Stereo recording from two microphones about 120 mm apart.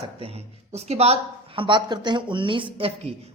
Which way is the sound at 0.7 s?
60° right (ahead or behind).